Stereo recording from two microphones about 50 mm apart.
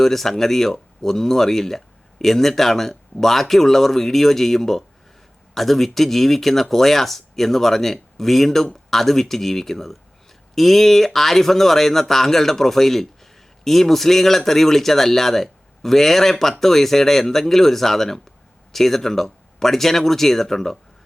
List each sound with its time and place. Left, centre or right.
0.0 s speech: centre